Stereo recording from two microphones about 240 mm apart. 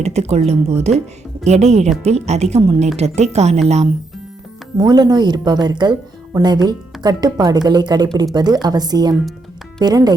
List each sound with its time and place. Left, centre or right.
0.0 s speech: right
4.8 s speech: centre